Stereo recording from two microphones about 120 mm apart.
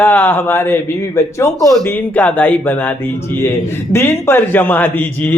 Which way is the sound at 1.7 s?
10° left (ahead or behind).